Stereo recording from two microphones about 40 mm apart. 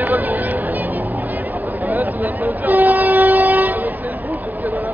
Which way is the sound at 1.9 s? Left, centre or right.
Right.